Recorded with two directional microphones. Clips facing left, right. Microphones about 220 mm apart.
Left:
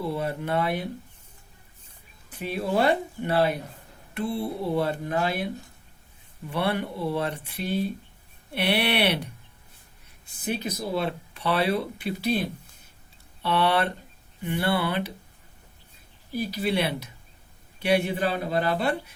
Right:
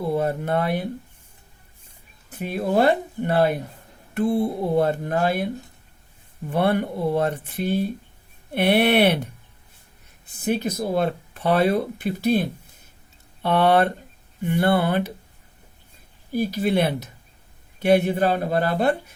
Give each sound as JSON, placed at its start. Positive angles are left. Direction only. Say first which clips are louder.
{"t": 0.0, "sound": "speech", "louder": "right 5 dB", "side_deg": -50}
{"t": 2.3, "sound": "speech", "louder": "right 4 dB", "side_deg": -50}
{"t": 6.5, "sound": "speech", "louder": "right 6 dB", "side_deg": -45}
{"t": 10.5, "sound": "speech", "louder": "right 5 dB", "side_deg": -50}
{"t": 16.3, "sound": "speech", "louder": "right 5 dB", "side_deg": -50}